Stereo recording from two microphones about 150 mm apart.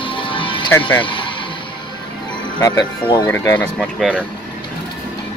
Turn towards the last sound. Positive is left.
turn(degrees=15)  # may be behind; listen again after turning